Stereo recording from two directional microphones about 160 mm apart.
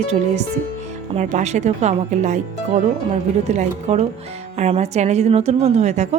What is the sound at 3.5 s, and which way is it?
A woman's voice, 45° right (ahead or behind).